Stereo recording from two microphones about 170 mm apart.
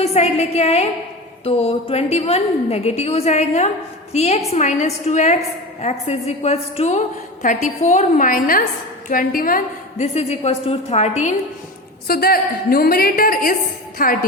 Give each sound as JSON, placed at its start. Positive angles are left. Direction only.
{"t": 0.0, "sound": "a woman's voice", "side_deg": 40}
{"t": 10.0, "sound": "a woman's voice", "side_deg": 40}
{"t": 12.0, "sound": "a woman's voice", "side_deg": 60}